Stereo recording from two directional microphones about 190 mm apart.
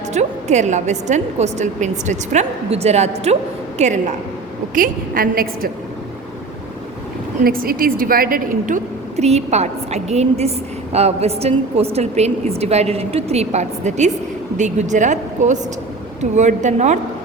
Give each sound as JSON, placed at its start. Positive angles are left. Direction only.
{"t": 0.1, "sound": "a woman's voice", "side_deg": -35}
{"t": 7.4, "sound": "a woman's voice", "side_deg": -50}